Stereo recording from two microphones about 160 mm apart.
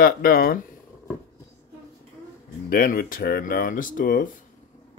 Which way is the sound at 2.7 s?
65° left (ahead or behind).